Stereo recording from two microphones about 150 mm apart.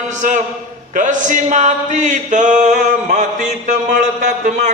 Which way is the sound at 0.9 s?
60° right (ahead or behind).